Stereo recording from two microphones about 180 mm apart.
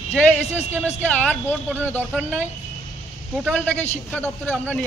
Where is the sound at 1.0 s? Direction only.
10° left (ahead or behind).